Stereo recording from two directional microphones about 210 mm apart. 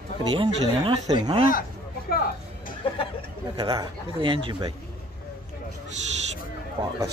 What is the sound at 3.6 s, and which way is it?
Speech, 25° right (ahead or behind).